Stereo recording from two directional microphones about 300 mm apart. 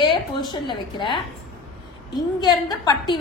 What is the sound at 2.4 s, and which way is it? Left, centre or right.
Speech, centre.